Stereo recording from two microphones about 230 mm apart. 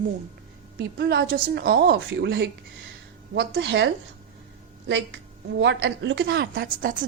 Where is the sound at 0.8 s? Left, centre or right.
Right.